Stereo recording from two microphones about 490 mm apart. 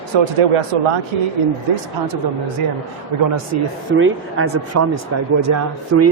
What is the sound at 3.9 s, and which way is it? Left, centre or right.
Speech, right.